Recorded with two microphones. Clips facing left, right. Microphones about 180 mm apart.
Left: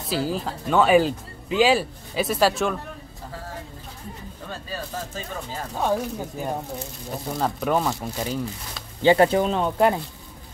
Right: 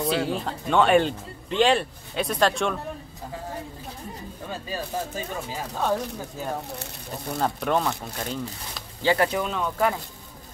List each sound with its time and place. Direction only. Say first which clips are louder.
0.1 s speech: even; centre (ahead or behind)
4.5 s speech: right 2 dB; 10° right (ahead or behind)
5.8 s speech: left 2 dB; 10° left (ahead or behind)
9.0 s speech: left 6 dB; 25° left (ahead or behind)